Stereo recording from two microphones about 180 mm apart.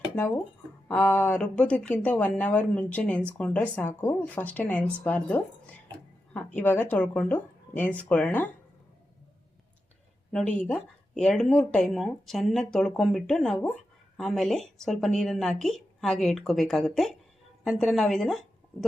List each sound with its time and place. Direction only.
0.9 s speech: 10° left (ahead or behind)
6.6 s speech: 10° left (ahead or behind)
10.3 s a woman's voice: 5° left (ahead or behind)